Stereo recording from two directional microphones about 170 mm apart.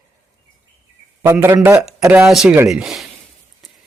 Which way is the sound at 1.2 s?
15° right (ahead or behind).